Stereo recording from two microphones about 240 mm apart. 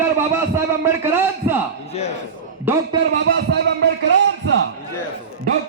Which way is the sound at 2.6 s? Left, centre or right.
Centre.